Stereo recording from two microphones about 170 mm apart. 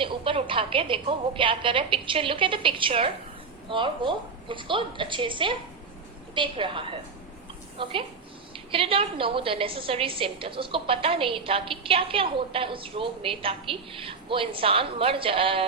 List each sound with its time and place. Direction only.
0.0 s a woman's voice: 30° right (ahead or behind)